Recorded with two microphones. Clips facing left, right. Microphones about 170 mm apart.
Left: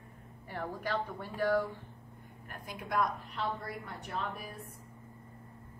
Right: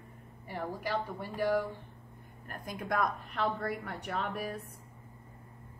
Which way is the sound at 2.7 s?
50° right (ahead or behind).